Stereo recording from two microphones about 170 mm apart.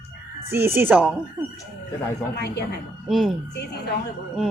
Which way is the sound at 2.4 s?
75° left (ahead or behind).